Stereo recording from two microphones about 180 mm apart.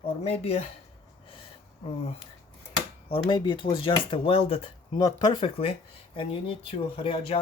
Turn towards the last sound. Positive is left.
turn(degrees=30)  # may be behind; listen again after turning